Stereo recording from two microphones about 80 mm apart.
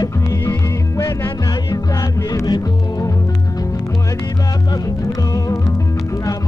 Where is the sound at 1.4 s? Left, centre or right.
Left.